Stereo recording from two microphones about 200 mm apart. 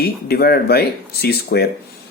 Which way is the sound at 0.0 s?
50° left (ahead or behind).